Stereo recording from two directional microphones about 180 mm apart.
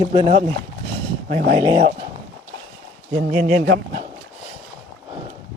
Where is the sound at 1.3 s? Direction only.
45° right (ahead or behind).